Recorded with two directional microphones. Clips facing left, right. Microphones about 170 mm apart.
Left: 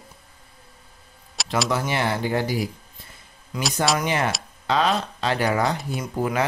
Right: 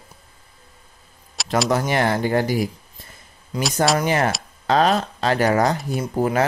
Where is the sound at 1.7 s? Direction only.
45° right (ahead or behind).